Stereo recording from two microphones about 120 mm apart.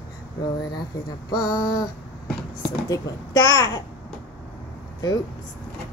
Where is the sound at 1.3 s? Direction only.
35° left (ahead or behind).